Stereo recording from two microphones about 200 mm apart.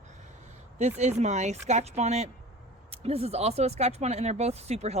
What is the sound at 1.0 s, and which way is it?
Speech, 35° right (ahead or behind).